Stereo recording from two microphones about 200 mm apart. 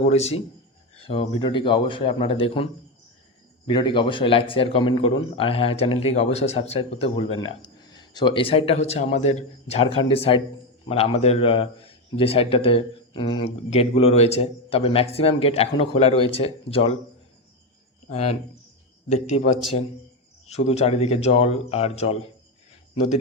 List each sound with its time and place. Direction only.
0.0 s a man's voice: 30° left (ahead or behind)
3.7 s a man's voice: 25° left (ahead or behind)
18.1 s speech: 30° left (ahead or behind)